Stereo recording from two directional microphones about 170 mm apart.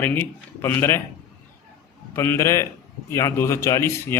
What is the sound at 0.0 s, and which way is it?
Speech, 10° left (ahead or behind).